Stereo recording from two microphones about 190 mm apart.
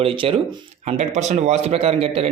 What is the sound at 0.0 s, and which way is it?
Speech, 30° right (ahead or behind).